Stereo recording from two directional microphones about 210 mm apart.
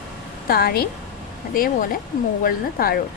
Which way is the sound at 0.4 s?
45° left (ahead or behind).